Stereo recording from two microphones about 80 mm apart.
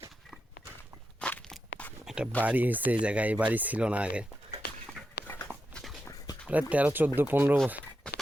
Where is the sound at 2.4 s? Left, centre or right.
Right.